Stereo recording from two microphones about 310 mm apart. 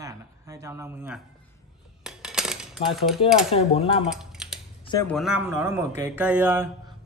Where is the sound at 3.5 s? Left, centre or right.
Centre.